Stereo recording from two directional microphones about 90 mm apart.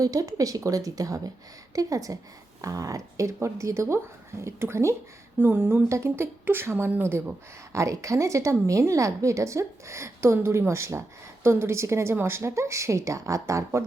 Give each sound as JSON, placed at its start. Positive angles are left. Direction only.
{"t": 0.0, "sound": "speech", "side_deg": -40}